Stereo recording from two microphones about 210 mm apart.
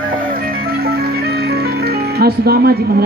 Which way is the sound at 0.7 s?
45° right (ahead or behind).